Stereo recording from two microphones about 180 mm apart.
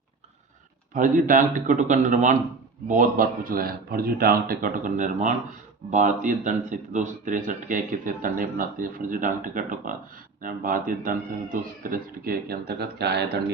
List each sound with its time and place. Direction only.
0.9 s speech: 45° right (ahead or behind); by 13.4 s 65° right (ahead or behind)